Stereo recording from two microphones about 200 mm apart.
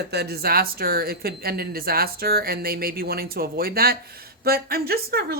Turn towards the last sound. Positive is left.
turn(degrees=-50)  # may be behind; listen again after turning